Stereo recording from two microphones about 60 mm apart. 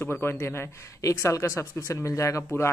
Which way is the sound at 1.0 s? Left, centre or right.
Left.